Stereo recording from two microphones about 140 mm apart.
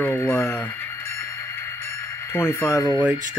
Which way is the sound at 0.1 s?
20° left (ahead or behind).